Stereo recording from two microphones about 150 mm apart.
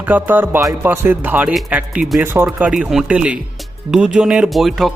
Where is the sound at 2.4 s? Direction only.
5° right (ahead or behind).